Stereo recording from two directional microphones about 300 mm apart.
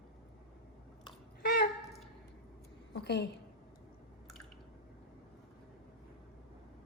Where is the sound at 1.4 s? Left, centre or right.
Left.